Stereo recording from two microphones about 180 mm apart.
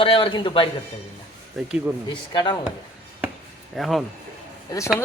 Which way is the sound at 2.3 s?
25° left (ahead or behind).